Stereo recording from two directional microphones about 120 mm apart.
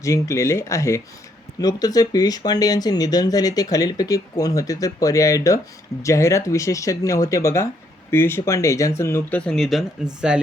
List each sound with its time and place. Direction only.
0.0 s speech: 25° left (ahead or behind)
9.4 s speech: 5° left (ahead or behind)